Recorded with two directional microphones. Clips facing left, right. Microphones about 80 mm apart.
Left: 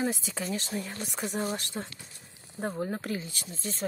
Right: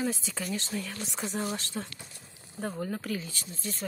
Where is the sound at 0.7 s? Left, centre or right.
Left.